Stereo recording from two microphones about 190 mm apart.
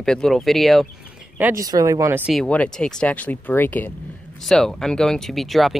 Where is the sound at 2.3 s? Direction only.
5° left (ahead or behind).